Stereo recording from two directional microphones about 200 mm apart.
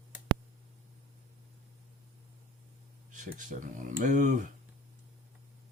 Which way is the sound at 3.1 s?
40° right (ahead or behind).